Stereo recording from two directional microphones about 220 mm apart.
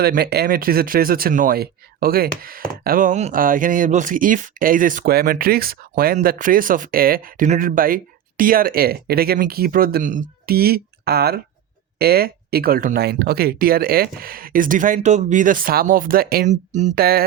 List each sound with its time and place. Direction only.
0.0 s speech: 45° right (ahead or behind)